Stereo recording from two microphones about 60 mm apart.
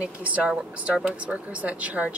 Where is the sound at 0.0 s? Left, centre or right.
Right.